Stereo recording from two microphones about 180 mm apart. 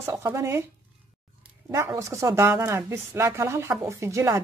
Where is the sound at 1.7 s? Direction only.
15° right (ahead or behind).